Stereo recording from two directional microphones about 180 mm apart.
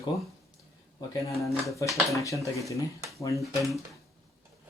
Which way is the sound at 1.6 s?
15° left (ahead or behind).